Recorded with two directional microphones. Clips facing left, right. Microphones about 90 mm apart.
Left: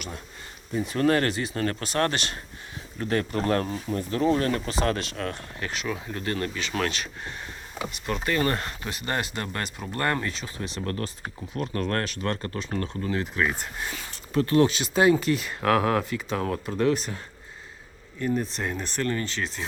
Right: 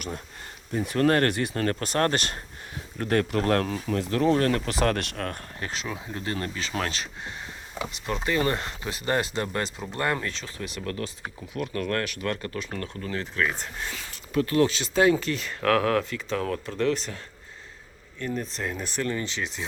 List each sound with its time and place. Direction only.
0.7 s speech: 55° right (ahead or behind)
1.6 s speech: 45° right (ahead or behind)
3.0 s speech: 55° right (ahead or behind); by 4.2 s 80° right
4.2 s speech: 55° right (ahead or behind)
5.5 s speech: 30° right (ahead or behind)
8.9 s speech: 30° right (ahead or behind)
10.2 s speech: 10° left (ahead or behind)
10.6 s speech: 35° left (ahead or behind); by 13.9 s 10° left (ahead or behind)
14.1 s speech: 30° left (ahead or behind)
14.7 s speech: 15° left (ahead or behind)
18.2 s speech: 10° left (ahead or behind)
18.8 s speech: 10° right (ahead or behind)